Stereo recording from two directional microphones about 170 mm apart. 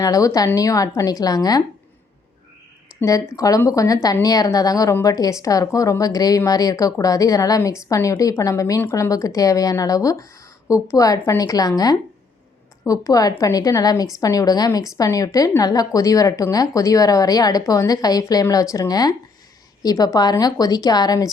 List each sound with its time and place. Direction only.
0.0 s a woman's voice: 20° left (ahead or behind)
3.0 s a woman's voice: 20° left (ahead or behind)